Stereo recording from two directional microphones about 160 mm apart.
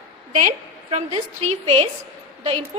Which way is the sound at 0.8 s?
40° right (ahead or behind).